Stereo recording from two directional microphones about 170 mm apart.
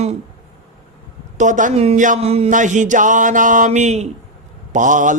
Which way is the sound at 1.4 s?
50° right (ahead or behind).